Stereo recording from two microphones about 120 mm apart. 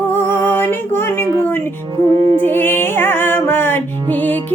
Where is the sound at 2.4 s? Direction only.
15° left (ahead or behind).